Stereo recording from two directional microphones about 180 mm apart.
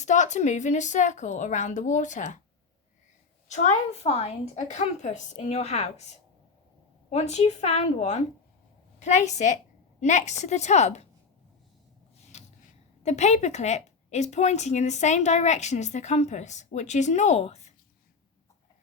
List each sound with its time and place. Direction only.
0.0 s a woman's voice: 40° left (ahead or behind)
3.5 s a woman's voice: 40° left (ahead or behind)
7.1 s a woman's voice: 40° left (ahead or behind)
12.3 s gasp: 40° left (ahead or behind)
13.0 s a woman's voice: 40° left (ahead or behind)